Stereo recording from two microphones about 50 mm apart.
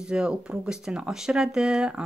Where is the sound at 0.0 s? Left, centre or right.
Centre.